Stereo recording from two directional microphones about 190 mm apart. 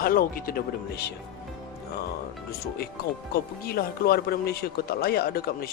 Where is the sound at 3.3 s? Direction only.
55° left (ahead or behind).